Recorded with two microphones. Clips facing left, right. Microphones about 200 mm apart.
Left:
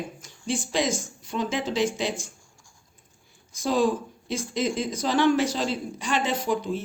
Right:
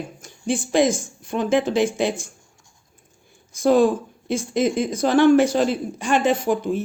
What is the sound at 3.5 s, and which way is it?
A woman's voice, 55° right (ahead or behind).